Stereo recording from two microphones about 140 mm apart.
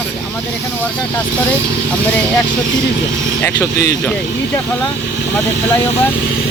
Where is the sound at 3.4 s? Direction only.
15° left (ahead or behind).